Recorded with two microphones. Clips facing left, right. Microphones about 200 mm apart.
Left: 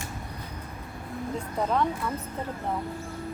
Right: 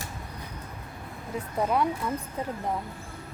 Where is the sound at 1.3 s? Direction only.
10° right (ahead or behind).